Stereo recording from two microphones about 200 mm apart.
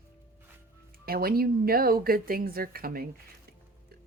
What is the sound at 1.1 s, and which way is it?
Speech, 50° right (ahead or behind).